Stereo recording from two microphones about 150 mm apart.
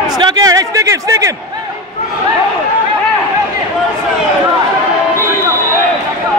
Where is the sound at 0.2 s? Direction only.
25° right (ahead or behind).